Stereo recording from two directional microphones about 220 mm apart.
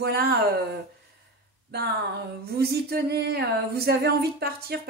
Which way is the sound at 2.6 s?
45° right (ahead or behind).